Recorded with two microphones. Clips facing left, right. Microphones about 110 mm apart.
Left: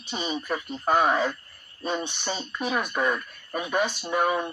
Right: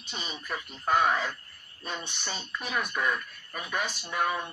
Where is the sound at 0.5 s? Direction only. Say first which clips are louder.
Left 3 dB; 35° left (ahead or behind).